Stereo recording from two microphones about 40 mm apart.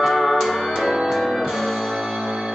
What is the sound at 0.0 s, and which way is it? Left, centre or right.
Music, centre.